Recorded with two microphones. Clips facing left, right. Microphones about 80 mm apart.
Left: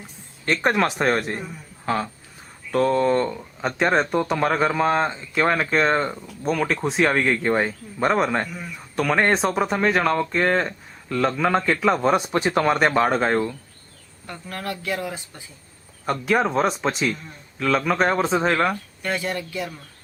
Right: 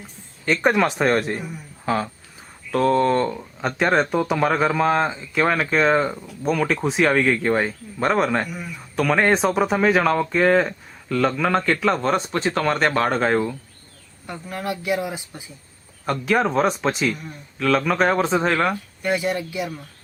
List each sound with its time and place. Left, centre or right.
0.4 s speech: centre
14.3 s speech: centre
16.0 s speech: centre
19.0 s speech: centre